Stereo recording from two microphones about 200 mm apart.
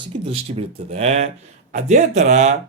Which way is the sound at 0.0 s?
30° right (ahead or behind).